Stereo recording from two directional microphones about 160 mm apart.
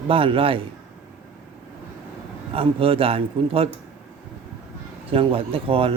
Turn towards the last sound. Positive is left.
turn(degrees=-35)  # may be behind; listen again after turning